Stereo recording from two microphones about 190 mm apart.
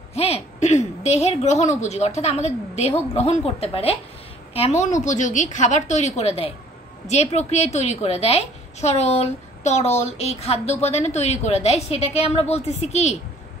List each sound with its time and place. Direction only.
0.1 s a woman's voice: 35° left (ahead or behind)